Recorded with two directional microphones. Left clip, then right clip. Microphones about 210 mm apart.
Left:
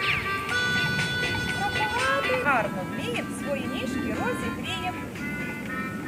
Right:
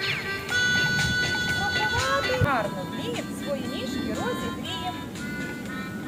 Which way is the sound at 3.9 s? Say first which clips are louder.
Even; 60° right (ahead or behind).